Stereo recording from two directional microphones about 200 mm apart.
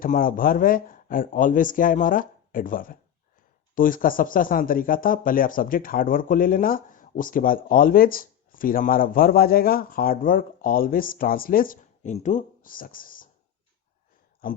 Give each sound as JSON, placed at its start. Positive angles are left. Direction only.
{"t": 0.0, "sound": "speech", "side_deg": 45}